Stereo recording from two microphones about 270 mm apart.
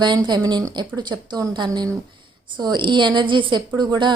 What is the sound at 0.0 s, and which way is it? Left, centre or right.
A woman's voice, centre.